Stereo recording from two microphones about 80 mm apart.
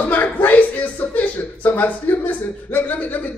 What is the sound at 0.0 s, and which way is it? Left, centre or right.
A man's voice, left.